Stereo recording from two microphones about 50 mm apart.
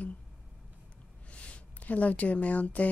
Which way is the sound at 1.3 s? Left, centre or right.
Left.